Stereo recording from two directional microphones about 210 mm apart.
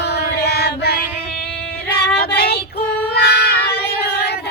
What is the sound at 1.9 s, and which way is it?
Female singing, 50° left (ahead or behind).